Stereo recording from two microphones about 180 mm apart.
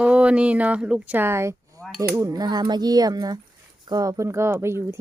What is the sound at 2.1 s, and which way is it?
Speech, 20° right (ahead or behind).